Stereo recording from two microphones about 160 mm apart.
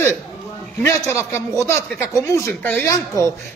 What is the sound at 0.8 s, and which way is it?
A man's voice, 15° left (ahead or behind).